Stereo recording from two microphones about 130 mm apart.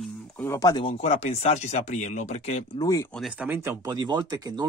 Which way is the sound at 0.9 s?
55° left (ahead or behind).